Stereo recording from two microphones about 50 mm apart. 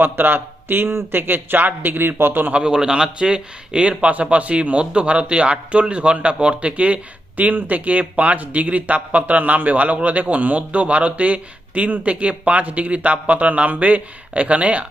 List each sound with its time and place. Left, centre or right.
0.0 s speech: right
2.5 s speech: right